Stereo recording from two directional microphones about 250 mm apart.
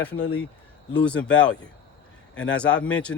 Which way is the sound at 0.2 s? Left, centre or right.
Left.